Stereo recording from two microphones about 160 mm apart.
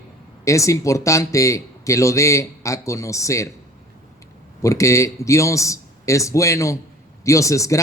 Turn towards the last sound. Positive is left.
turn(degrees=20)  # may be behind; listen again after turning